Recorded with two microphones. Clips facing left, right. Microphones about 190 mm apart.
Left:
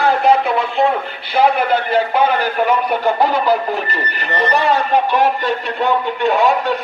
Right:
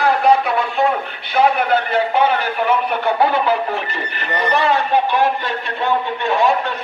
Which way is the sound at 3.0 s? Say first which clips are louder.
Left 1 dB; 40° left (ahead or behind).